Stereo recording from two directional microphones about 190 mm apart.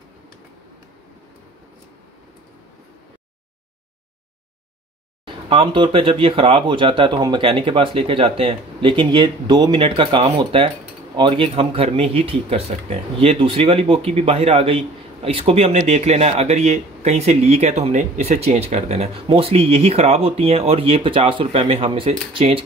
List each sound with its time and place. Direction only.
5.2 s speech: 25° right (ahead or behind)